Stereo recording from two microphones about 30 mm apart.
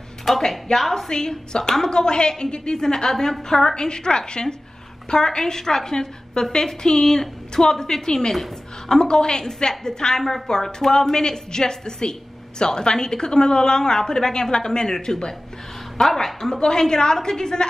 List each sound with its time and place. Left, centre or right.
0.3 s speech: centre
0.8 s a woman's voice: centre
10.2 s a woman's voice: centre
10.5 s a woman's voice: centre